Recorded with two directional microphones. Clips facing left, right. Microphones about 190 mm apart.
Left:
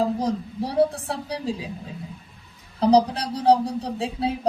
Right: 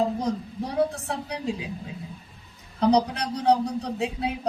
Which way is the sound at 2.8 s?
30° left (ahead or behind).